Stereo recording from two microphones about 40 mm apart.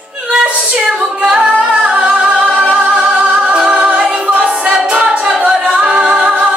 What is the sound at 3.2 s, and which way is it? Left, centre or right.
Music, right.